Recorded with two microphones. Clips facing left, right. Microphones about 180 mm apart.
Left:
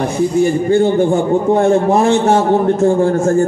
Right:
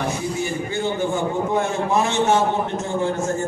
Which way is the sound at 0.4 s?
50° left (ahead or behind).